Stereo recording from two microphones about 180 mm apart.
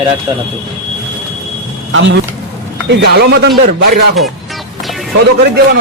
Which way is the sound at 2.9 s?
70° right (ahead or behind).